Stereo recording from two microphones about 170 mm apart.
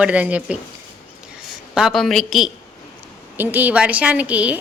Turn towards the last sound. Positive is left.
turn(degrees=-10)  # may be behind; listen again after turning